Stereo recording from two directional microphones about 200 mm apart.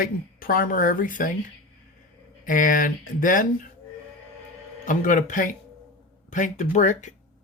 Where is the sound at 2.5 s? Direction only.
40° left (ahead or behind).